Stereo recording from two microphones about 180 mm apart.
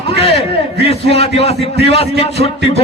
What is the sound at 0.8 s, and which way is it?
A man's voice, 35° left (ahead or behind).